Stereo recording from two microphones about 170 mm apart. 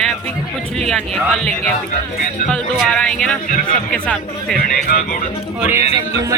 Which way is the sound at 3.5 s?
55° left (ahead or behind).